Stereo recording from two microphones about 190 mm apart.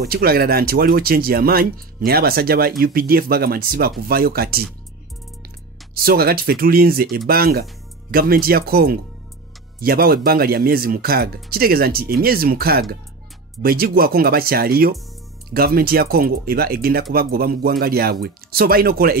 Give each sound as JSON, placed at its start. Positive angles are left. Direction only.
{"t": 0.0, "sound": "speech", "side_deg": -55}
{"t": 5.9, "sound": "speech", "side_deg": -50}